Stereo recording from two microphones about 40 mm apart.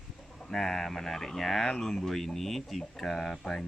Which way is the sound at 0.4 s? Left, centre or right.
Centre.